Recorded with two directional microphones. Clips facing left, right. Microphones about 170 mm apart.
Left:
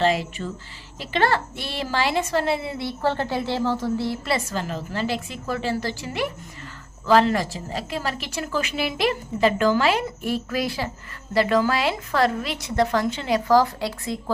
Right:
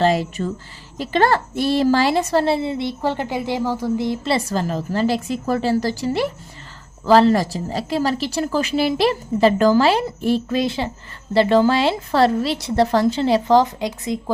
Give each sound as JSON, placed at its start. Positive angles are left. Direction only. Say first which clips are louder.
{"t": 0.0, "sound": "a woman's voice", "louder": "right 4 dB", "side_deg": -40}